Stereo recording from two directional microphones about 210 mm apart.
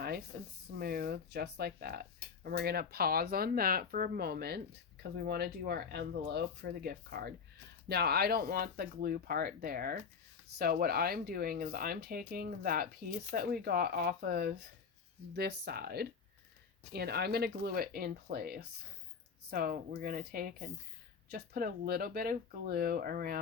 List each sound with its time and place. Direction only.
0.8 s speech: 45° right (ahead or behind)